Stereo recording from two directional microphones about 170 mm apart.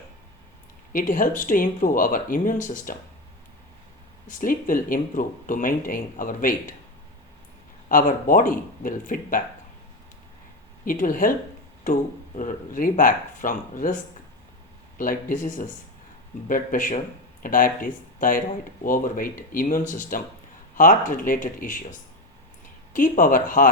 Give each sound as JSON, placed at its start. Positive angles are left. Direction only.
{"t": 0.9, "sound": "speech", "side_deg": 50}
{"t": 4.3, "sound": "speech", "side_deg": 55}
{"t": 7.9, "sound": "speech", "side_deg": 55}
{"t": 10.8, "sound": "speech", "side_deg": 55}